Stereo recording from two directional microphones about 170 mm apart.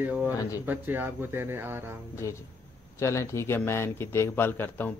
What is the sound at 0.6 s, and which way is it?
Speech, 10° right (ahead or behind).